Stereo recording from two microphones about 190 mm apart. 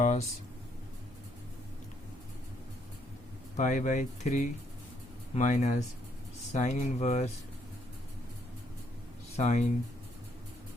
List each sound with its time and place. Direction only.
0.0 s speech: 40° left (ahead or behind)
3.6 s speech: 40° left (ahead or behind)
9.3 s speech: 35° left (ahead or behind)